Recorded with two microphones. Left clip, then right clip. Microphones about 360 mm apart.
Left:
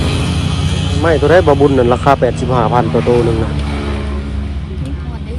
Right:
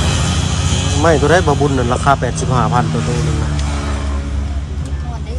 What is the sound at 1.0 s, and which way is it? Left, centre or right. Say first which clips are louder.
Speech: left 3 dB; centre.